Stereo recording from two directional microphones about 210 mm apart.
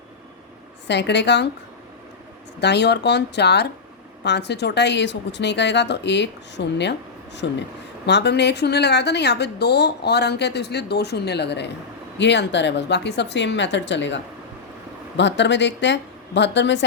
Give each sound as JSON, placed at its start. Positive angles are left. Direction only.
{"t": 0.9, "sound": "a woman's voice", "side_deg": 55}
{"t": 2.6, "sound": "a woman's voice", "side_deg": 55}